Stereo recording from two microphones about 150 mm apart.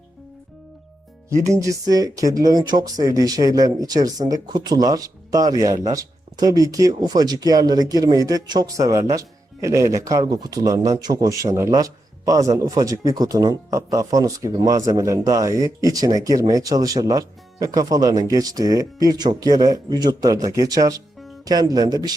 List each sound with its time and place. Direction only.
1.5 s speech: 20° right (ahead or behind)